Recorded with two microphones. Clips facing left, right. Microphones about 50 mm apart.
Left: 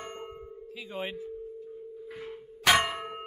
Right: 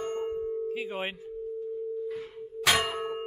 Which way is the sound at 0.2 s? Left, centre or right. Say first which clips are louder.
Right 11 dB; centre.